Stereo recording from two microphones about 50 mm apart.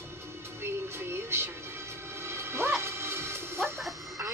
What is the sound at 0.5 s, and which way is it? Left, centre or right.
Music, right.